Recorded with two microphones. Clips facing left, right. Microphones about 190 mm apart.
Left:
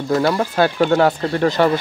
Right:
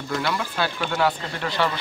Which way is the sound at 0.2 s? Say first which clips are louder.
Left 8 dB; 45° left (ahead or behind).